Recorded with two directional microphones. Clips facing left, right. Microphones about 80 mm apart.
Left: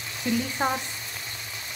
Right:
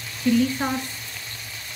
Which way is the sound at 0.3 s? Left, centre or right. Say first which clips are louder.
Right 7 dB; left.